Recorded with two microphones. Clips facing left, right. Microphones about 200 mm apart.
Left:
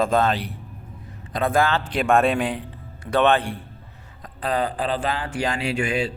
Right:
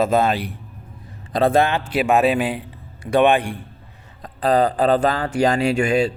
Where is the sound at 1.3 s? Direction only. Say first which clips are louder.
Right 5 dB; 30° right (ahead or behind).